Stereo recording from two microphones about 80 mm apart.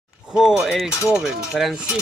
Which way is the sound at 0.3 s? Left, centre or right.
Centre.